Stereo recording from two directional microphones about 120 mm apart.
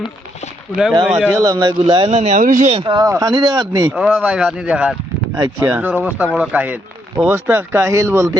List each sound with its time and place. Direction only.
1.0 s speech: 5° right (ahead or behind)
1.3 s speech: 30° right (ahead or behind)
2.0 s speech: 75° right (ahead or behind); by 2.7 s 90° right
2.7 s speech: 40° right (ahead or behind)
3.9 s speech: 5° right (ahead or behind)
5.4 s speech: 25° right (ahead or behind)
6.2 s speech: centre (ahead or behind)
6.5 s speech: 15° right (ahead or behind)